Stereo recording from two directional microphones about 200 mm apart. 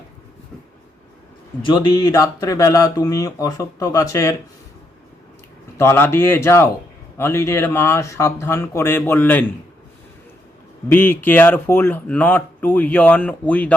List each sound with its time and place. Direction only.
1.6 s speech: 25° left (ahead or behind)
5.7 s speech: 10° left (ahead or behind)
10.8 s speech: 10° left (ahead or behind)